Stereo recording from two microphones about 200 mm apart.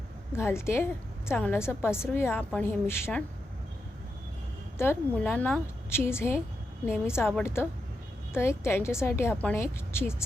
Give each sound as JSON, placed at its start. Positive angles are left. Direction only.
{"t": 0.3, "sound": "a woman's voice", "side_deg": 15}
{"t": 4.8, "sound": "a woman's voice", "side_deg": 10}